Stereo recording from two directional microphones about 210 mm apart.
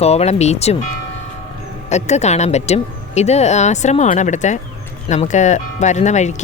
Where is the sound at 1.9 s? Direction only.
30° left (ahead or behind).